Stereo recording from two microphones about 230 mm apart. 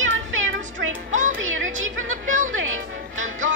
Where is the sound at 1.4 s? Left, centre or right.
Right.